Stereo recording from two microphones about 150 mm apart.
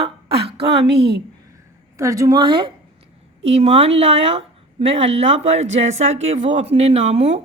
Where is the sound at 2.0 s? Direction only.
20° right (ahead or behind).